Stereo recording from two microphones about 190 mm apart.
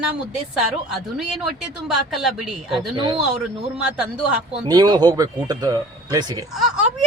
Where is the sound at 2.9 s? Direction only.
25° right (ahead or behind).